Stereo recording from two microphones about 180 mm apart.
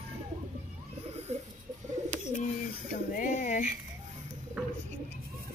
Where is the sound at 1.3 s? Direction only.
40° right (ahead or behind).